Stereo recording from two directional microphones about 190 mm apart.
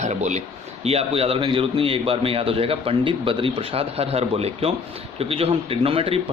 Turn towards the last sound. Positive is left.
turn(degrees=-30)  # may be behind; listen again after turning